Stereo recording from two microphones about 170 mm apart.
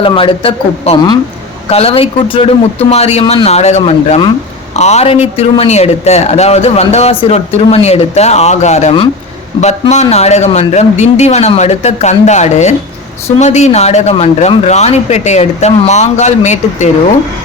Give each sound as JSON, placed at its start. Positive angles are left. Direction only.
{"t": 0.0, "sound": "speech", "side_deg": 30}